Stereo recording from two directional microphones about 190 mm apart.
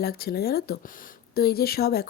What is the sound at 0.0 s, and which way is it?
Speech, 55° left (ahead or behind).